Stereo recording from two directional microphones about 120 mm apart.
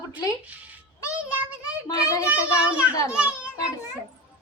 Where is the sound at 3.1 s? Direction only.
10° right (ahead or behind).